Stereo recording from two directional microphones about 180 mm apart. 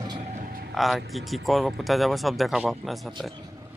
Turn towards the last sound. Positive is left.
turn(degrees=0)  # may be behind; listen again after turning